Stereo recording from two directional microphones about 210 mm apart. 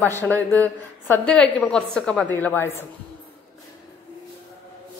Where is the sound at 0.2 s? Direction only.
10° left (ahead or behind).